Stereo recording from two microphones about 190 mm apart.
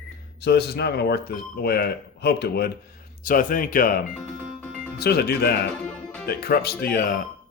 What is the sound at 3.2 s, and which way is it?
Speech, 45° left (ahead or behind).